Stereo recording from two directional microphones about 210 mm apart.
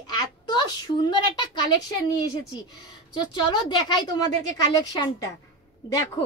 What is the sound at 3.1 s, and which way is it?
A woman's voice, 20° left (ahead or behind).